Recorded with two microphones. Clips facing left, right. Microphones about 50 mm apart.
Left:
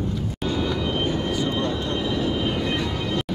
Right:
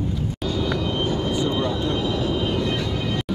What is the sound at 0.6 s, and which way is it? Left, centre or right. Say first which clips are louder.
Vehicle: right 2 dB; centre.